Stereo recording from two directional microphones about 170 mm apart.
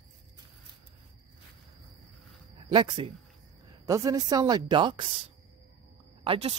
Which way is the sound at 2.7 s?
30° right (ahead or behind).